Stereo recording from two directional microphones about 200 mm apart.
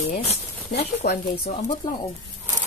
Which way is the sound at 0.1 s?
30° left (ahead or behind).